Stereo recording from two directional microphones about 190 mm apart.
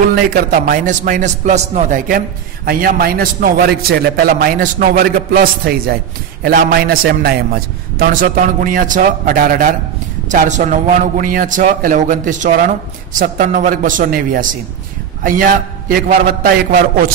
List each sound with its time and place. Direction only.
0.1 s a man's voice: 45° right (ahead or behind)